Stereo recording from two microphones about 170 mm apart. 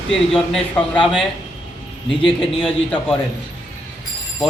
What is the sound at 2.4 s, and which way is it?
Speech, 5° left (ahead or behind).